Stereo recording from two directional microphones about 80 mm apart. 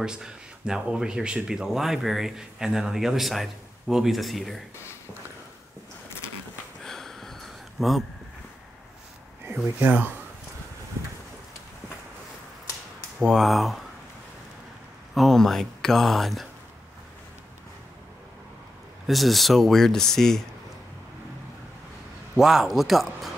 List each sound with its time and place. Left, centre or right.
0.0 s speech: centre
6.8 s a sound: centre
9.8 s speech: right
13.2 s speech: centre
15.1 s speech: centre
19.0 s speech: centre
22.3 s speech: centre